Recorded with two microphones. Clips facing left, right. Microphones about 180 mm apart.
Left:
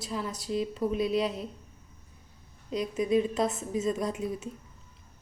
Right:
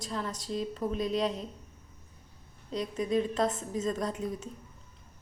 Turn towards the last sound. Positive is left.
turn(degrees=10)  # may be behind; listen again after turning